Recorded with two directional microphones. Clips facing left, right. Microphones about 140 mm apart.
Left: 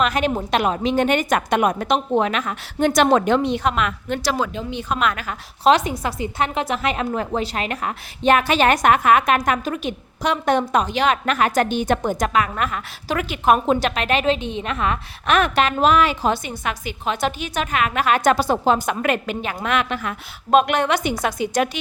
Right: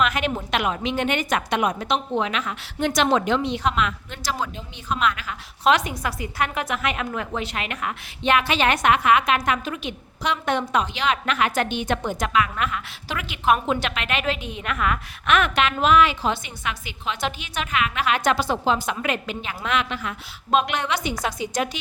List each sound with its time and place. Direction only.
0.0 s a woman's voice: 35° left (ahead or behind)
5.6 s a woman's voice: 30° left (ahead or behind); by 21.8 s 60° left (ahead or behind)